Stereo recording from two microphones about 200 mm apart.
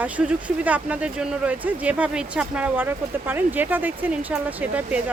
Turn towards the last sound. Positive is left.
turn(degrees=-10)  # may be behind; listen again after turning